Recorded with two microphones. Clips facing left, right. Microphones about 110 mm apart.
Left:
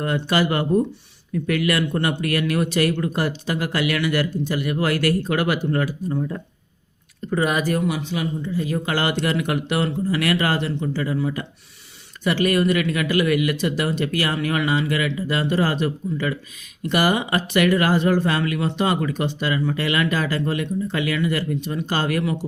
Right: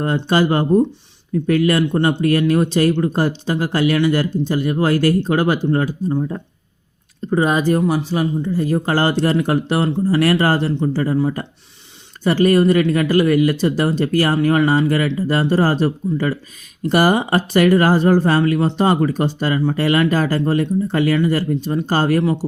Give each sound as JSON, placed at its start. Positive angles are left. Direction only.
{"t": 0.0, "sound": "speech", "side_deg": -30}